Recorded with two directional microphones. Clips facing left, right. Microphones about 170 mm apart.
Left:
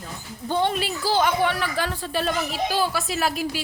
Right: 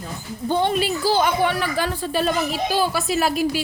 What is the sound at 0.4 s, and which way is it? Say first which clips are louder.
A woman's voice: right 3 dB; 15° right (ahead or behind).